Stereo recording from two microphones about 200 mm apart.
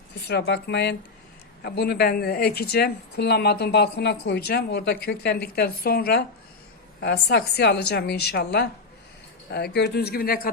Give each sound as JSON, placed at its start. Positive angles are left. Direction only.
{"t": 0.3, "sound": "a woman's voice", "side_deg": 55}